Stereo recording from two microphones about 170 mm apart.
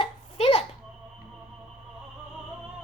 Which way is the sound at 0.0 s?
35° left (ahead or behind).